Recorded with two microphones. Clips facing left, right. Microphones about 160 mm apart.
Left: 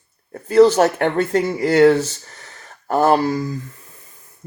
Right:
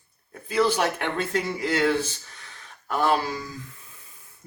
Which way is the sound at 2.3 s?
45° left (ahead or behind).